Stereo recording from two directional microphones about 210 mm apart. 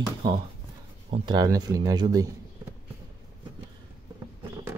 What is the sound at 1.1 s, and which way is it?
Speech, 20° right (ahead or behind).